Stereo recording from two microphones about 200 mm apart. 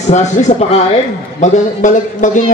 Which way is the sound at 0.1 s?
35° left (ahead or behind).